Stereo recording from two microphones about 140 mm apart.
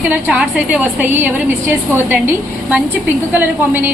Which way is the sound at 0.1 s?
10° right (ahead or behind).